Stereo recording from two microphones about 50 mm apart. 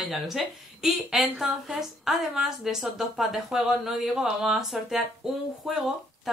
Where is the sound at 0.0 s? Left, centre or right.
Centre.